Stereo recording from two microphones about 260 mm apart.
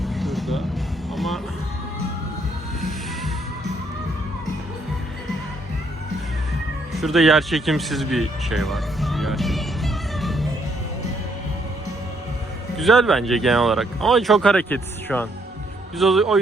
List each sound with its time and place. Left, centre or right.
0.0 s a sound: centre
1.1 s music: centre
7.0 s music: centre
12.7 s speech: centre